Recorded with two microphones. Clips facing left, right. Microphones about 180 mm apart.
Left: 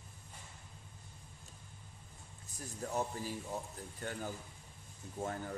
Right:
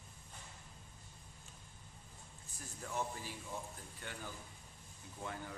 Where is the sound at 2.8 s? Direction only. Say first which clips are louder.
Left 4 dB; 40° left (ahead or behind).